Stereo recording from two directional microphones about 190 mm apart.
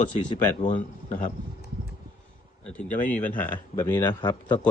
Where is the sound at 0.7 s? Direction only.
40° left (ahead or behind).